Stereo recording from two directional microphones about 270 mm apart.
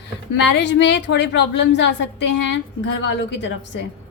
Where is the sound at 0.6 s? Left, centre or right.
Left.